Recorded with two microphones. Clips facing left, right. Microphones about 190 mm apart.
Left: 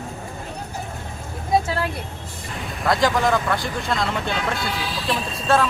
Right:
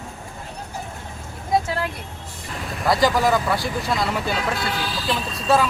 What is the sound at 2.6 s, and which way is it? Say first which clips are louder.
Speech: right 1 dB; centre (ahead or behind).